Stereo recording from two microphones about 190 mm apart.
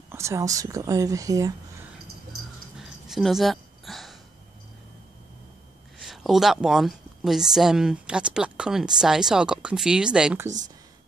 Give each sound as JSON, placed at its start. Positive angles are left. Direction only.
{"t": 0.1, "sound": "speech", "side_deg": -15}
{"t": 2.8, "sound": "a sound", "side_deg": 0}
{"t": 5.9, "sound": "speech", "side_deg": 0}